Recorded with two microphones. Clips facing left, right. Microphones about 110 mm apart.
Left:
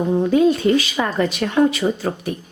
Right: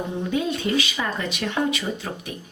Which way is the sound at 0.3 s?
40° left (ahead or behind).